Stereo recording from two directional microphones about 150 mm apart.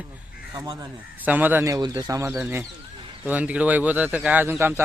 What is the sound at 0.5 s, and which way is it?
Speech, 25° right (ahead or behind).